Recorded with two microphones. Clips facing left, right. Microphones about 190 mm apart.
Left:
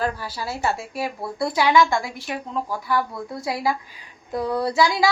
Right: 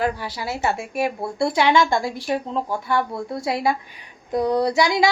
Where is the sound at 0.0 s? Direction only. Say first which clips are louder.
Right 2 dB; 20° right (ahead or behind).